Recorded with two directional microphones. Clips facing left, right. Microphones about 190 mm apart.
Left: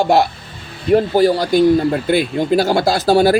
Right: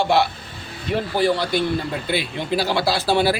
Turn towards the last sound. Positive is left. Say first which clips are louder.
# left 7 dB
turn(degrees=45)  # may be behind; listen again after turning